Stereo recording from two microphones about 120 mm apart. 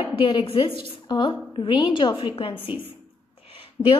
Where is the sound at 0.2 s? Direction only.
45° left (ahead or behind).